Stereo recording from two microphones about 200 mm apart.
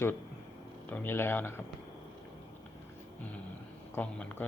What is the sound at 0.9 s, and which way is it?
Speech, 10° left (ahead or behind).